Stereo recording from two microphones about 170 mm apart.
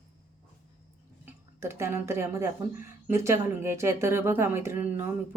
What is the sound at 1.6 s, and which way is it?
Speech, 15° right (ahead or behind).